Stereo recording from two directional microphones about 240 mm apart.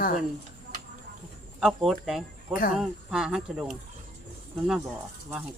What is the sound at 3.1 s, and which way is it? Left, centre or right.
Speech, centre.